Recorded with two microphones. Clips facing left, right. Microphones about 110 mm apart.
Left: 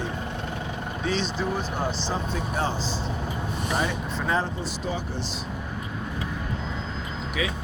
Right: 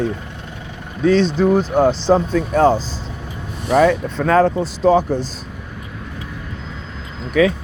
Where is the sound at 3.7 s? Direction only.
75° right (ahead or behind); by 5.3 s 50° right (ahead or behind).